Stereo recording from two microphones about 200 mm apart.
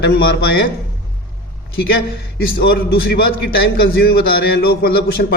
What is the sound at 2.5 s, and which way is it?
A man's voice, 50° left (ahead or behind).